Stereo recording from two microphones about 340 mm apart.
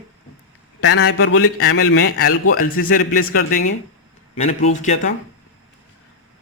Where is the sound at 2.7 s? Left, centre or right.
Left.